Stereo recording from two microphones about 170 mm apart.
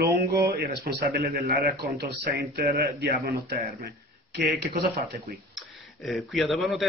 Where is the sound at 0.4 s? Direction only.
70° right (ahead or behind).